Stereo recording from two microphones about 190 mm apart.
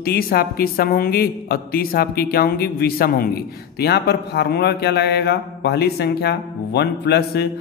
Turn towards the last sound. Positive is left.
turn(degrees=60)  # may be behind; listen again after turning